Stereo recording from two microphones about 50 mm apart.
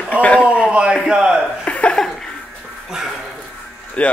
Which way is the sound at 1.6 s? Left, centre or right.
Left.